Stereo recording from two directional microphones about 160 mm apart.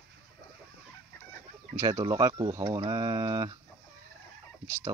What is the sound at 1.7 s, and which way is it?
Speech, 20° right (ahead or behind).